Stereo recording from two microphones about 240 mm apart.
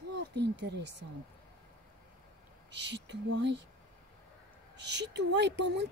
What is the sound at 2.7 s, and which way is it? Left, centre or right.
Speech, right.